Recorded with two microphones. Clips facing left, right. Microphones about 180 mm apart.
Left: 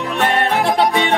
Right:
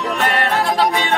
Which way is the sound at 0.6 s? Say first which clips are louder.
Left 2 dB; 20° left (ahead or behind).